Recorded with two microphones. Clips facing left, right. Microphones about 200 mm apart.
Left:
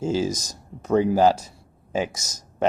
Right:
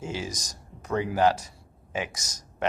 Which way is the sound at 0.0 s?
35° left (ahead or behind).